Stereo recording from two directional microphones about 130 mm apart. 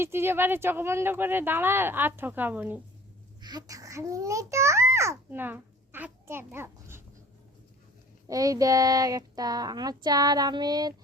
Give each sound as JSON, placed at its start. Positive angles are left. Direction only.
{"t": 0.0, "sound": "speech", "side_deg": -20}
{"t": 3.4, "sound": "a child's voice", "side_deg": -30}
{"t": 8.3, "sound": "speech", "side_deg": -25}